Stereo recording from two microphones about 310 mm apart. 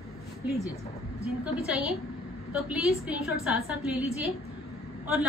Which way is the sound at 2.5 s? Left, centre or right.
Centre.